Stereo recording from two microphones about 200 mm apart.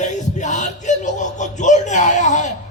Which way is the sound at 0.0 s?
35° left (ahead or behind).